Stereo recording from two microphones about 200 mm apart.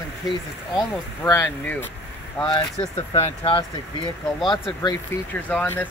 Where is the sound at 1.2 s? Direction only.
10° left (ahead or behind).